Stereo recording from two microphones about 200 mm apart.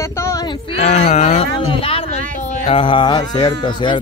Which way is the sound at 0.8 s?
35° left (ahead or behind).